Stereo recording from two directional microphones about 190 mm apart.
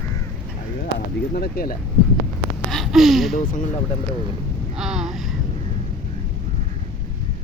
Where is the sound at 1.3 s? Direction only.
50° left (ahead or behind).